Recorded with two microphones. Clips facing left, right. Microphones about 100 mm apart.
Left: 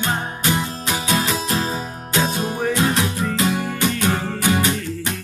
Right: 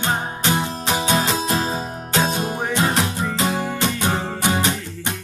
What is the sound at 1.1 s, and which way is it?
Music, 30° right (ahead or behind).